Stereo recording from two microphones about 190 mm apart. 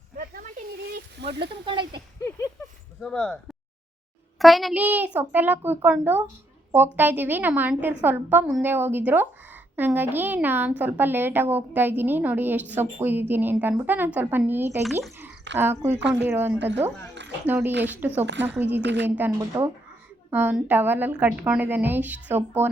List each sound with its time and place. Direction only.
0.2 s snake: 50° right (ahead or behind)
1.6 s speech: 25° right (ahead or behind)
3.0 s speech: 5° left (ahead or behind)
4.4 s a woman's voice: centre (ahead or behind)
16.0 s a woman's voice: 70° right (ahead or behind)
16.2 s a woman's voice: 10° right (ahead or behind)
18.8 s a woman's voice: 65° right (ahead or behind)
19.0 s a woman's voice: 10° right (ahead or behind)